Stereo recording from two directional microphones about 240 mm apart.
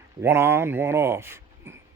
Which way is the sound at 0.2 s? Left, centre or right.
Centre.